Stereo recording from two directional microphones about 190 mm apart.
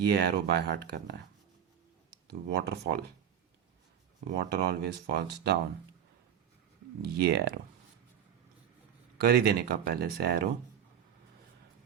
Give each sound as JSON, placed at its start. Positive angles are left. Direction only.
{"t": 0.0, "sound": "speech", "side_deg": -60}
{"t": 2.2, "sound": "speech", "side_deg": -60}
{"t": 4.4, "sound": "speech", "side_deg": -60}
{"t": 7.3, "sound": "speech", "side_deg": -55}
{"t": 9.2, "sound": "speech", "side_deg": -55}